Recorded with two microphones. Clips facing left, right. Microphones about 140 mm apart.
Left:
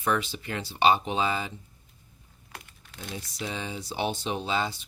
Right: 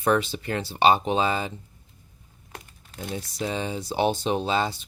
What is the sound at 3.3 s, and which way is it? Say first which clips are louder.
Speech: right 6 dB; 40° right (ahead or behind).